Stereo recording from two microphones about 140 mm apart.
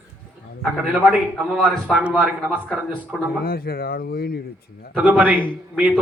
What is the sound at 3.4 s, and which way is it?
Speech, 90° left.